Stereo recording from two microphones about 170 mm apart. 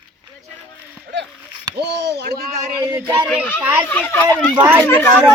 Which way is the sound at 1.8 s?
80° right.